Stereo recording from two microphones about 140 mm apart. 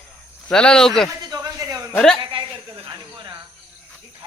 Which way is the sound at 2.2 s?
35° right (ahead or behind).